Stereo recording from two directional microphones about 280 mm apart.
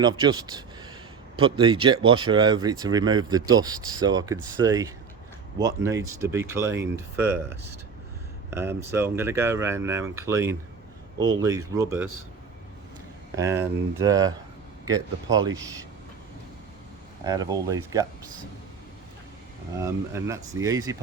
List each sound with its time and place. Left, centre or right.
0.0 s speech: centre
8.4 s speech: centre
13.3 s speech: centre
17.2 s speech: centre
19.8 s speech: centre